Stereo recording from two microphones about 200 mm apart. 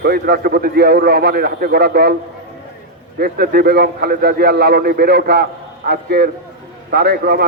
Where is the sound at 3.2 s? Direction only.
50° right (ahead or behind).